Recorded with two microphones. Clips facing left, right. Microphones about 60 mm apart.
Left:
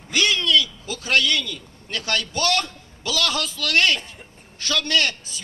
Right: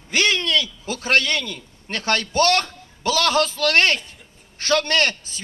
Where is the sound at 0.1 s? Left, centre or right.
Right.